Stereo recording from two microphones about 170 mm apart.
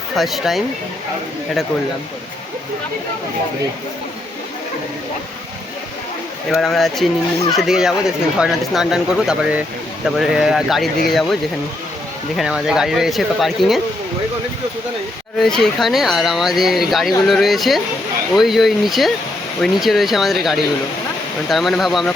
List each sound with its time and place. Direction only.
0.2 s speech: centre (ahead or behind)
6.5 s speech: centre (ahead or behind)
12.4 s speech: centre (ahead or behind)
15.4 s speech: centre (ahead or behind)